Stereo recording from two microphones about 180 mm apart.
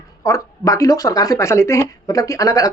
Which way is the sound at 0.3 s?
20° left (ahead or behind).